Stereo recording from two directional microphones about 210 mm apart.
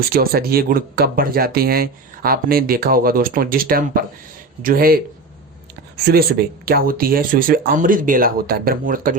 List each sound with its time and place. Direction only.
0.1 s speech: 45° right (ahead or behind)
6.1 s speech: 45° right (ahead or behind)